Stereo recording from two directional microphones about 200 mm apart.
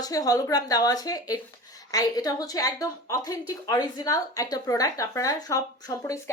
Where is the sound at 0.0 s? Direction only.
20° left (ahead or behind).